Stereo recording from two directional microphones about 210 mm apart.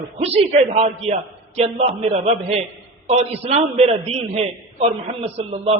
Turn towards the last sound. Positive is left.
turn(degrees=-30)  # may be behind; listen again after turning